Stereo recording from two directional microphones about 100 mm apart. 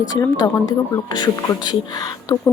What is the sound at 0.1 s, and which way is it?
A woman's voice, 40° left (ahead or behind).